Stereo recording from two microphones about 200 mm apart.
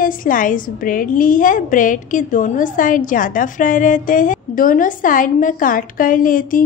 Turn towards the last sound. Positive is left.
turn(degrees=45)  # may be behind; listen again after turning